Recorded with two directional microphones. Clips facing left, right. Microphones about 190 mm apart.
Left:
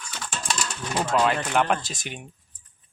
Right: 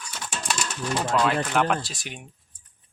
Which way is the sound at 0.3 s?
Centre (ahead or behind).